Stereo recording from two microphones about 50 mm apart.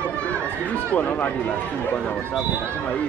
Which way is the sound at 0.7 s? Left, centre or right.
Left.